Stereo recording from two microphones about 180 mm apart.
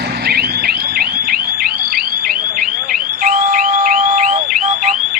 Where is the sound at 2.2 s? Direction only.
50° right (ahead or behind).